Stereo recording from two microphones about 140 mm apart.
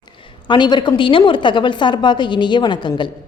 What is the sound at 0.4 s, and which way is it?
A woman's voice, 35° left (ahead or behind).